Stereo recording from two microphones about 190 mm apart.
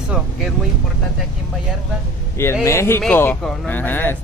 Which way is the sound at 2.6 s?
15° left (ahead or behind).